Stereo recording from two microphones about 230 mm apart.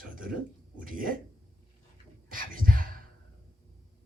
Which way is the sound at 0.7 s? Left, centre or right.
Right.